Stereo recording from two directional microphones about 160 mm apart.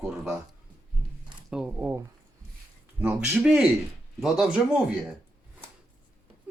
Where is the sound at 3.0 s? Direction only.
5° right (ahead or behind).